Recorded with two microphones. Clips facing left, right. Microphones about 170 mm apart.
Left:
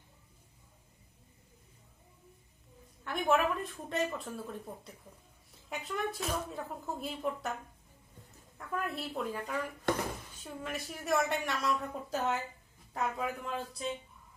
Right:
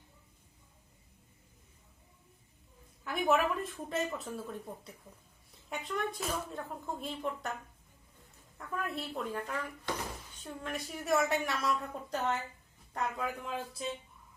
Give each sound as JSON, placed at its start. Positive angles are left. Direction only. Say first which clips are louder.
{"t": 3.0, "sound": "a woman's voice", "louder": "even", "side_deg": 0}
{"t": 8.5, "sound": "a woman's voice", "louder": "left 1 dB", "side_deg": 0}
{"t": 9.9, "sound": "speech", "louder": "left 7 dB", "side_deg": 55}
{"t": 10.4, "sound": "a woman's voice", "louder": "right 1 dB", "side_deg": 0}